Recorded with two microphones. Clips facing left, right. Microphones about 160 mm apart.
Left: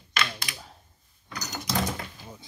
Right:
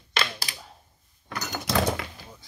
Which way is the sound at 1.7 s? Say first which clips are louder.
Right 5 dB; 75° right (ahead or behind).